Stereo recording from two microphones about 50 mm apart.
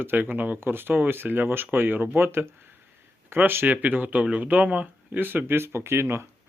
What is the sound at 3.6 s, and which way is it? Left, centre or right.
Speech, right.